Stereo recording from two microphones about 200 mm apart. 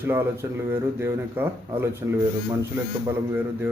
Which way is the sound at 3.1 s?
10° right (ahead or behind).